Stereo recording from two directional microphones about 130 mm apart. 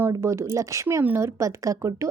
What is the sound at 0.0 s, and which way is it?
A woman's voice, 20° right (ahead or behind).